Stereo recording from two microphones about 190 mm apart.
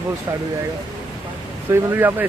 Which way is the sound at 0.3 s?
15° right (ahead or behind).